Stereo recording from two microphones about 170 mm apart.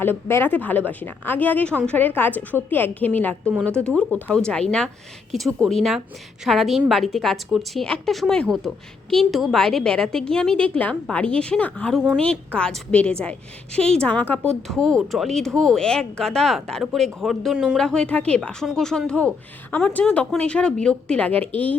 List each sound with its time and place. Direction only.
0.0 s a woman's voice: 15° left (ahead or behind)
5.6 s a woman's voice: centre (ahead or behind)